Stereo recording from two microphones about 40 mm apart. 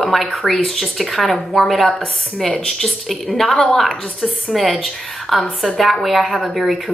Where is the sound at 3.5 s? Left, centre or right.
Centre.